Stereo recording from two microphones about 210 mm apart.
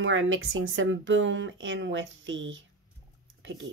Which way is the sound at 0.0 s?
65° right (ahead or behind).